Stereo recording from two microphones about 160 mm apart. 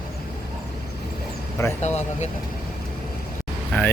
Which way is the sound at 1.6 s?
15° left (ahead or behind).